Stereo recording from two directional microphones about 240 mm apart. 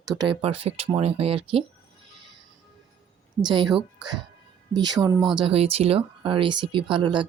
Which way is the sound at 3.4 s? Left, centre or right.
Centre.